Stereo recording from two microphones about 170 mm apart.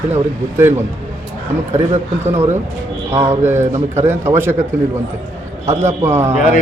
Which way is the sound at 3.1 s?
15° right (ahead or behind).